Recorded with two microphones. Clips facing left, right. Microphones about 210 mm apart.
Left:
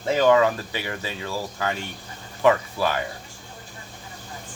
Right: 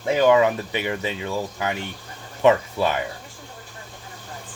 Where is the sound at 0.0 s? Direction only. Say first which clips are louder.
Right 1 dB; 15° right (ahead or behind).